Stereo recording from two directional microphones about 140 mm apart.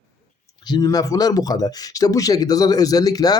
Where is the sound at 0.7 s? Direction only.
30° left (ahead or behind).